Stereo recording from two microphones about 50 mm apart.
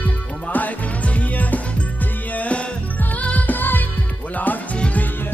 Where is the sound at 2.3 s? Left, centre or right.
Left.